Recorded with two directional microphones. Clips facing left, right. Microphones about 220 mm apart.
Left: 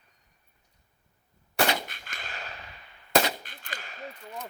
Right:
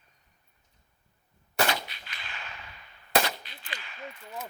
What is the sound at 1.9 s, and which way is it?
Gunshot, 45° left (ahead or behind).